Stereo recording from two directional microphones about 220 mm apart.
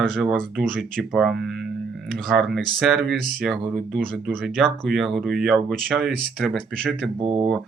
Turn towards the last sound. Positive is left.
turn(degrees=-25)  # may be behind; listen again after turning